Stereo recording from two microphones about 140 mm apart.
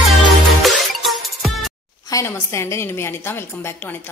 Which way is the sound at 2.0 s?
20° left (ahead or behind).